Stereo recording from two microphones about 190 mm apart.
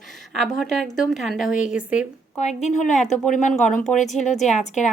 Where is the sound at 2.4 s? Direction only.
40° left (ahead or behind).